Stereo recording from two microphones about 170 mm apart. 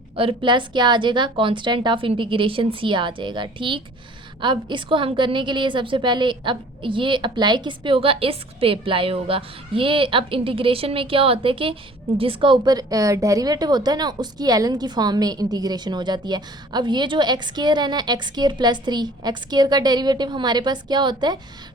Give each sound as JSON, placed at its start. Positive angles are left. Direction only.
{"t": 0.2, "sound": "a woman's voice", "side_deg": -30}